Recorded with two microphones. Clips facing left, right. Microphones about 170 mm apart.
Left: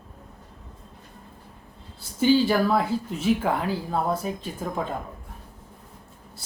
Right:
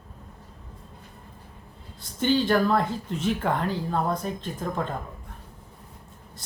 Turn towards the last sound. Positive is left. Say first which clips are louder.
# even
turn(degrees=5)  # may be behind; listen again after turning